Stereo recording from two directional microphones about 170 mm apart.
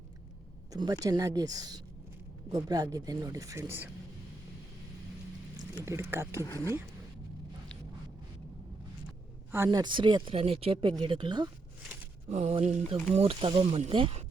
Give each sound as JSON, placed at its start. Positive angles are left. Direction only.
{"t": 0.7, "sound": "speech", "side_deg": -20}
{"t": 5.8, "sound": "speech", "side_deg": -15}
{"t": 6.4, "sound": "speech", "side_deg": 20}
{"t": 9.6, "sound": "speech", "side_deg": -25}
{"t": 12.3, "sound": "speech", "side_deg": -40}